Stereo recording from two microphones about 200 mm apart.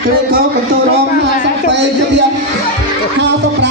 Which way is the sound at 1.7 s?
60° right (ahead or behind).